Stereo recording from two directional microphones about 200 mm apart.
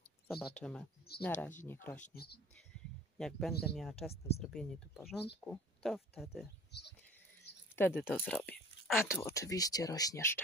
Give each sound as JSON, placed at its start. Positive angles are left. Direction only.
{"t": 0.3, "sound": "speech", "side_deg": 0}
{"t": 1.1, "sound": "speech", "side_deg": 50}
{"t": 1.7, "sound": "speech", "side_deg": 10}
{"t": 2.1, "sound": "speech", "side_deg": 55}
{"t": 3.2, "sound": "speech", "side_deg": 0}
{"t": 6.7, "sound": "goat", "side_deg": 55}
{"t": 7.7, "sound": "speech", "side_deg": 10}